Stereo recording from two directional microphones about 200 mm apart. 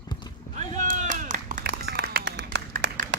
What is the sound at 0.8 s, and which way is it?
Clapping, 40° right (ahead or behind).